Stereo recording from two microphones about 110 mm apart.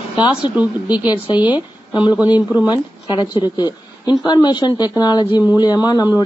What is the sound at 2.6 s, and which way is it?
Speech, 40° left (ahead or behind).